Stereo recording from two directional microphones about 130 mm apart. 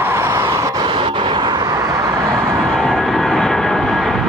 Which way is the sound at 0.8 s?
40° right (ahead or behind).